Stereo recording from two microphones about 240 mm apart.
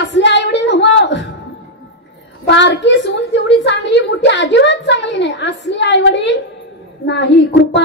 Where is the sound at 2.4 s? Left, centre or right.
Left.